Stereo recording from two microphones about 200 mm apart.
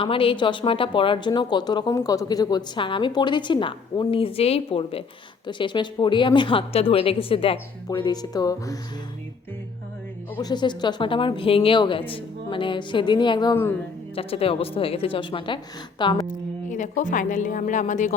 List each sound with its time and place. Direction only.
0.0 s speech: 25° left (ahead or behind)
10.3 s speech: 20° left (ahead or behind)
14.2 s speech: 30° left (ahead or behind)
16.2 s speech: 40° left (ahead or behind)